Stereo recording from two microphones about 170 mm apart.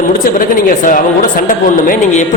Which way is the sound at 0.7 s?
50° left (ahead or behind).